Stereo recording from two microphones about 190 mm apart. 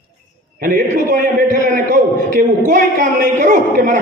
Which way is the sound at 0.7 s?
50° right (ahead or behind).